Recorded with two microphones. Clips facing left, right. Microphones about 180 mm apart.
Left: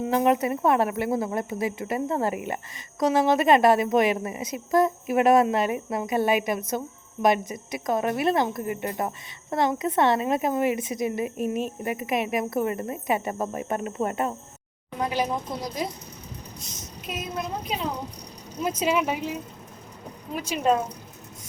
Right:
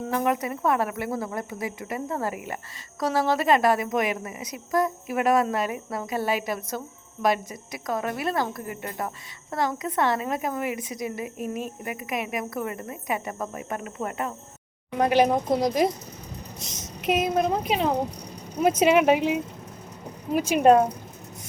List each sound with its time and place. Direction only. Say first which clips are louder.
0.1 s a woman's voice: left 4 dB; 25° left (ahead or behind)
14.9 s speech: right 6 dB; 60° right (ahead or behind)
16.6 s speech: right 2 dB; 85° right; by 19.4 s 70° right (ahead or behind)
20.3 s speech: right 6 dB; 45° right (ahead or behind)